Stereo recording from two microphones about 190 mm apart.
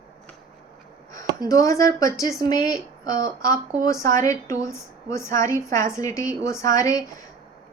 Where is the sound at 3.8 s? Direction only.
15° left (ahead or behind).